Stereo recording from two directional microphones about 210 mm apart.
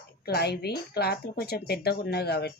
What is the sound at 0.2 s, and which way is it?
Speech, 50° left (ahead or behind).